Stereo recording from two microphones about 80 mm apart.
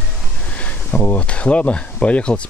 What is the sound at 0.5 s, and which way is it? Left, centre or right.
Speech, centre.